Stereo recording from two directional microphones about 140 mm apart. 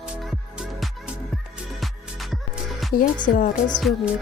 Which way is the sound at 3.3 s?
90° left.